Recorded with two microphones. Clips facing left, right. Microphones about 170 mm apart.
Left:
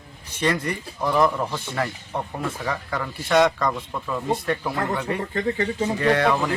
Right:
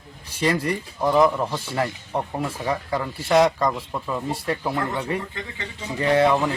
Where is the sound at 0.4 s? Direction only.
30° right (ahead or behind).